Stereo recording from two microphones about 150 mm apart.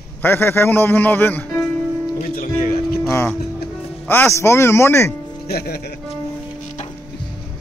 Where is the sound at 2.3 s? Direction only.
85° left.